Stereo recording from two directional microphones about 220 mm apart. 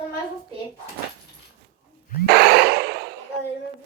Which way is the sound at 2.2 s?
45° right (ahead or behind).